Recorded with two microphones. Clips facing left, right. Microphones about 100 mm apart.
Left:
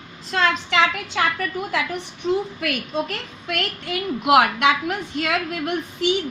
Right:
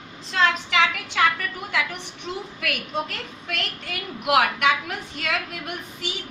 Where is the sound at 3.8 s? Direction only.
20° left (ahead or behind).